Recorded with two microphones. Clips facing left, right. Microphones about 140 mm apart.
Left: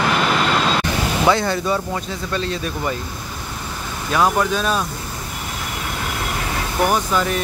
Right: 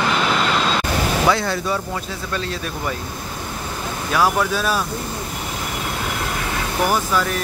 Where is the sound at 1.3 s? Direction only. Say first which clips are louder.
Left 2 dB; centre (ahead or behind).